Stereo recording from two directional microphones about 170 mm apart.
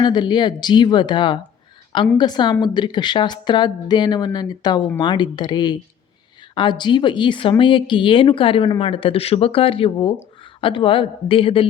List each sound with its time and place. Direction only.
0.0 s a woman's voice: 25° left (ahead or behind)